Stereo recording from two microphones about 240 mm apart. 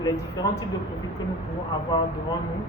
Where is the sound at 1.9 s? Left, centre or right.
Centre.